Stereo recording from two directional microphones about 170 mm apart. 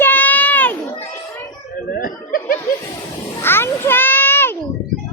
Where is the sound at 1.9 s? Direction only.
60° left (ahead or behind).